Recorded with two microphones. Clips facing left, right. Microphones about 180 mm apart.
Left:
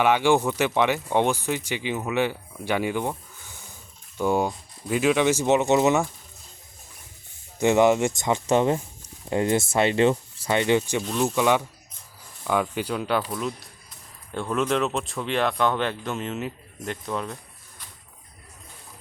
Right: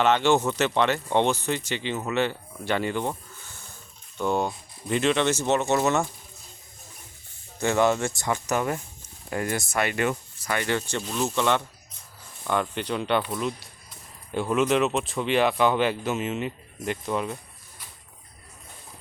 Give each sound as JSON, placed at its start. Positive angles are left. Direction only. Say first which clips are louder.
{"t": 0.0, "sound": "speech", "louder": "left 1 dB", "side_deg": 10}
{"t": 7.6, "sound": "speech", "louder": "left 4 dB", "side_deg": 15}
{"t": 11.0, "sound": "speech", "louder": "left 3 dB", "side_deg": 0}